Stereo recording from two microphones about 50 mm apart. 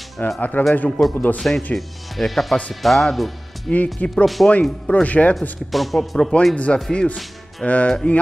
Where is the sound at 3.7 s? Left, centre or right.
Centre.